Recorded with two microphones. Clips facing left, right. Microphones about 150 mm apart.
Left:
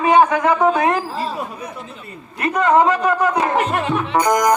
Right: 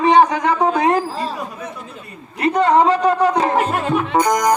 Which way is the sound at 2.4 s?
30° right (ahead or behind).